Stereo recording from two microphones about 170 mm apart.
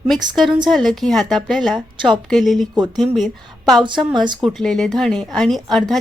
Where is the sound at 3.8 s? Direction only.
30° right (ahead or behind).